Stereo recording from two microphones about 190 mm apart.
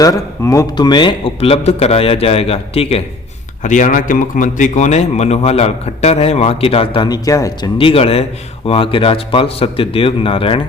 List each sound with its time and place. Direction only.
0.0 s a man's voice: 15° left (ahead or behind)